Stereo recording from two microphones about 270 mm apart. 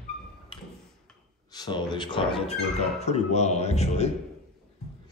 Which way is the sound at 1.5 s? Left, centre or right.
Centre.